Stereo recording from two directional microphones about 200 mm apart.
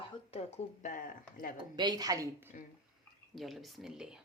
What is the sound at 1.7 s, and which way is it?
Speech, 20° right (ahead or behind).